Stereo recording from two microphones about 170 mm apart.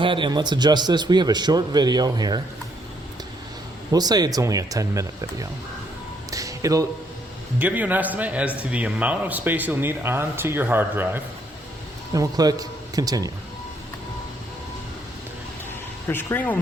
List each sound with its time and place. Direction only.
0.0 s a man's voice: 30° right (ahead or behind)
3.9 s a man's voice: 25° right (ahead or behind)
6.3 s a sound: 20° right (ahead or behind)
7.6 s a man's voice: 10° right (ahead or behind)
16.0 s speech: 10° left (ahead or behind)